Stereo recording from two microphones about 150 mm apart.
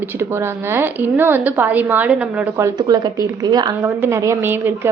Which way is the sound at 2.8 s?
25° right (ahead or behind).